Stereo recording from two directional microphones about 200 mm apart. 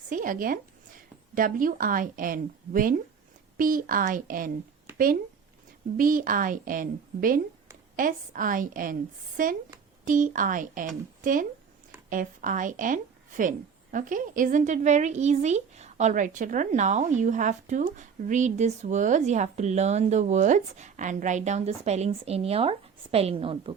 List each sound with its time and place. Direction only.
0.1 s a woman's voice: 40° right (ahead or behind)
6.0 s a woman's voice: 45° right (ahead or behind); by 23.7 s 25° right (ahead or behind)